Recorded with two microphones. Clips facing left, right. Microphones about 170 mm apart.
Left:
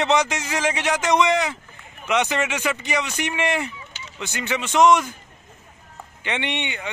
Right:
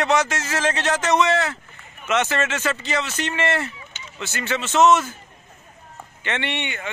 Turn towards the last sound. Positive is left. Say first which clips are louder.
# even
turn(degrees=20)  # may be behind; listen again after turning